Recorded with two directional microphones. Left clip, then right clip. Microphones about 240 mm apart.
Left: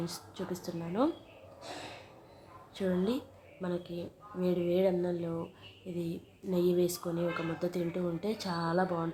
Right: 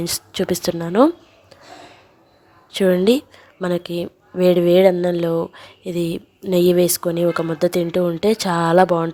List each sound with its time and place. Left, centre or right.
0.0 s speech: right
2.7 s speech: right